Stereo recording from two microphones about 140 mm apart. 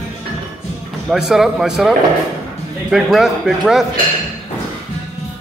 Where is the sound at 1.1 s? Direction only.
5° right (ahead or behind).